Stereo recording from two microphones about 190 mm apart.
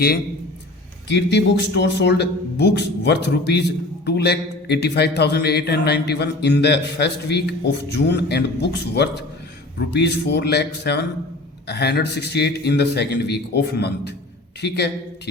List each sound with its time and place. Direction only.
1.0 s speech: 65° left (ahead or behind)